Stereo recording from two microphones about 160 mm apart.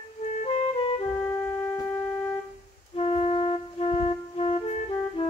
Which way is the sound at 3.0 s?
40° left (ahead or behind).